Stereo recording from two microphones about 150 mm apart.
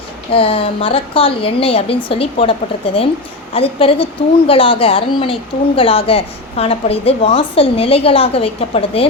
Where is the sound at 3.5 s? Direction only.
40° left (ahead or behind).